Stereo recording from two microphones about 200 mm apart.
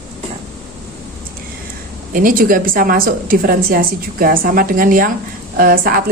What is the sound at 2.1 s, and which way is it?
Speech, 45° right (ahead or behind).